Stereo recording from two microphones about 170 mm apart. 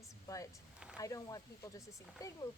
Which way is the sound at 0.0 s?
20° left (ahead or behind).